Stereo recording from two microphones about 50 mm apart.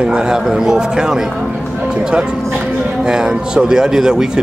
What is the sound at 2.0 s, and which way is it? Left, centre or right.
Music, centre.